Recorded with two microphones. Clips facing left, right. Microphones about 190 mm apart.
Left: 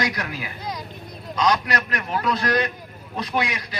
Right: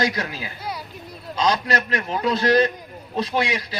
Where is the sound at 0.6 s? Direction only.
10° right (ahead or behind).